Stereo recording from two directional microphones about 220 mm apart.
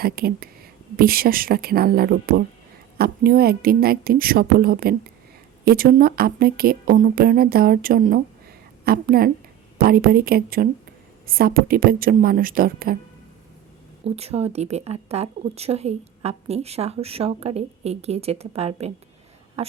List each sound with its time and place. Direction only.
0.0 s a woman's voice: 45° right (ahead or behind)
14.0 s speech: 30° right (ahead or behind)